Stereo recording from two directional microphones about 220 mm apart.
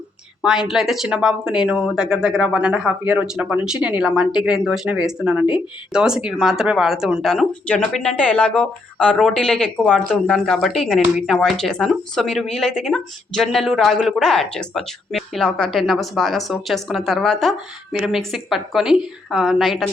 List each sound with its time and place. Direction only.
0.4 s speech: centre (ahead or behind)